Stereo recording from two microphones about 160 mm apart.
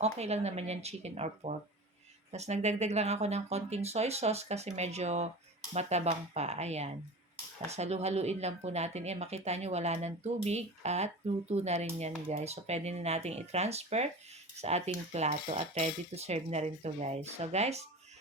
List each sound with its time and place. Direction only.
0.0 s speech: 40° right (ahead or behind)